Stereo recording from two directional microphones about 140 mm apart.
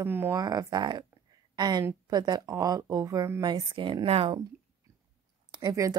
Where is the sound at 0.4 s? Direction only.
30° right (ahead or behind); by 4.4 s 45° right (ahead or behind).